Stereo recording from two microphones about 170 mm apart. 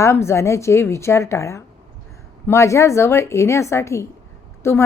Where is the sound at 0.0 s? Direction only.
15° left (ahead or behind).